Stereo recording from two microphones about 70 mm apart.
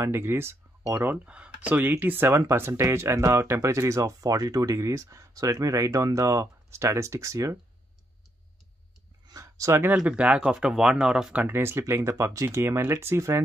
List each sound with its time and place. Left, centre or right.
0.0 s speech: right
1.1 s speech: centre
1.8 s speech: right
2.7 s speech: right
9.3 s a sound: right
10.0 s speech: centre
11.4 s speech: right